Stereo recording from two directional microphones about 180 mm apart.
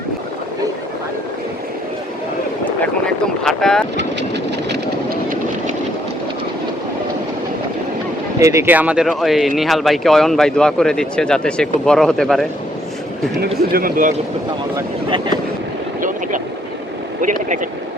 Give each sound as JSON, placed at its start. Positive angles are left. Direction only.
{"t": 3.4, "sound": "boat", "side_deg": 5}
{"t": 4.7, "sound": "vehicle", "side_deg": -55}
{"t": 8.4, "sound": "speech", "side_deg": -15}
{"t": 13.6, "sound": "speech", "side_deg": -55}
{"t": 16.0, "sound": "vehicle", "side_deg": -45}
{"t": 17.2, "sound": "speech", "side_deg": -45}